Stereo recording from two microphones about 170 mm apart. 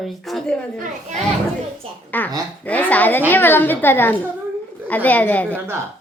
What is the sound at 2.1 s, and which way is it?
A woman's voice, 10° left (ahead or behind).